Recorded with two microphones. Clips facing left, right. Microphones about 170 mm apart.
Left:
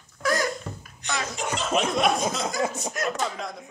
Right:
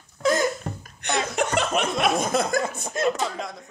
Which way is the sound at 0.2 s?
25° right (ahead or behind).